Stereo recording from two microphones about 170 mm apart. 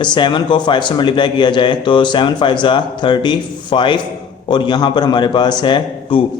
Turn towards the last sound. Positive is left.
turn(degrees=25)  # may be behind; listen again after turning